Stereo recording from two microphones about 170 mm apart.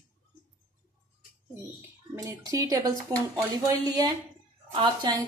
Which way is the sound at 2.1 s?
20° right (ahead or behind).